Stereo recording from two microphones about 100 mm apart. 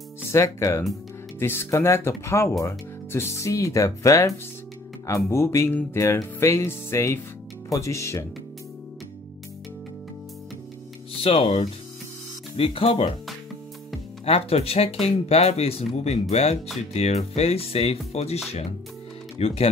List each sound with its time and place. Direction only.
0.3 s music: 30° left (ahead or behind)
3.1 s speech: 25° left (ahead or behind)
5.0 s music: 30° left (ahead or behind)
11.2 s speech: 80° left
12.5 s speech: 65° left (ahead or behind)
14.2 s speech: 75° left (ahead or behind)